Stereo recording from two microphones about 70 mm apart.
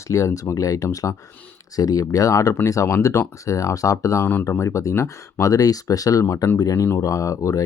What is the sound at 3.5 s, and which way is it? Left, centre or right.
Speech, left.